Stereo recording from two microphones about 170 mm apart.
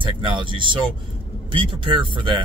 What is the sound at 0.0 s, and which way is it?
Speech, 30° right (ahead or behind).